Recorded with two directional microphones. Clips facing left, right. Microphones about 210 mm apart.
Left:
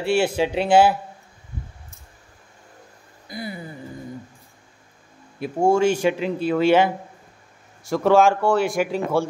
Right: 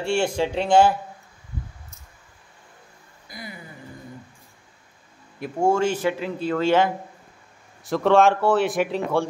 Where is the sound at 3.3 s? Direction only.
30° left (ahead or behind).